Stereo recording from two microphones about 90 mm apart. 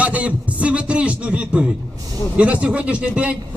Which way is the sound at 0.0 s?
15° right (ahead or behind).